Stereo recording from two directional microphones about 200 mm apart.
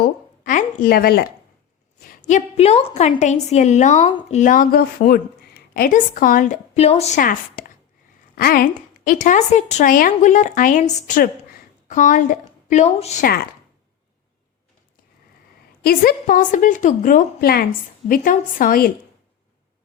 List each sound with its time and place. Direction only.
0.0 s a sound: 40° left (ahead or behind)
2.0 s a woman's voice: 35° left (ahead or behind)
13.2 s a woman's voice: 50° left (ahead or behind)
15.8 s a woman's voice: 50° left (ahead or behind)